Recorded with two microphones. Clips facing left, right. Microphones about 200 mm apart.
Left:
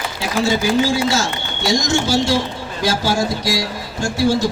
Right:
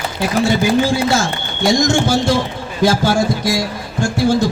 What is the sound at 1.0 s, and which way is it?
Speech, 55° right (ahead or behind).